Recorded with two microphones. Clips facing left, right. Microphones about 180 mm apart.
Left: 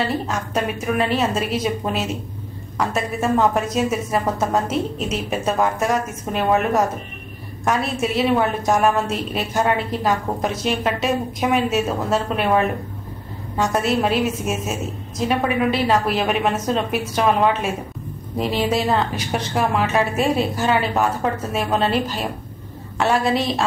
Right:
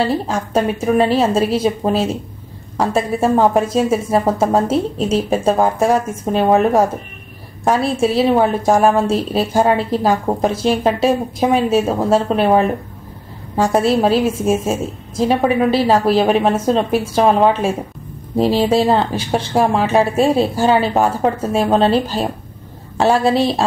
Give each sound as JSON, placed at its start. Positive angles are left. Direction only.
{"t": 0.0, "sound": "a woman's voice", "side_deg": -30}
{"t": 13.7, "sound": "a woman's voice", "side_deg": -30}